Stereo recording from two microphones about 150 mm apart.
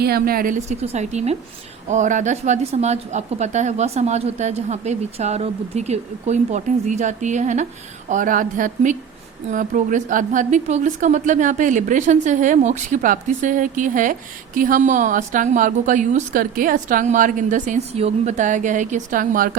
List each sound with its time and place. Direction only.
0.0 s a woman's voice: 85° right; by 7.7 s 50° right (ahead or behind)
8.1 s a woman's voice: 65° right (ahead or behind)